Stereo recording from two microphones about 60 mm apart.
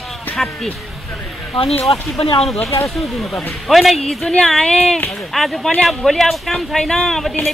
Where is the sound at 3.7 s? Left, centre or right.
Centre.